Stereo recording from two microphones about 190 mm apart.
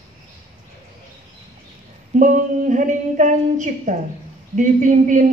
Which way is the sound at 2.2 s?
40° right (ahead or behind).